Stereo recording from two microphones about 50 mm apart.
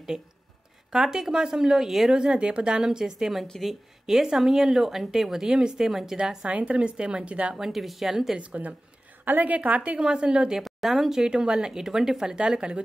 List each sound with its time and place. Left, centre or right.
0.9 s speech: centre
2.1 s a woman's voice: right
7.5 s speech: centre
8.4 s a woman's voice: right
10.6 s speech: centre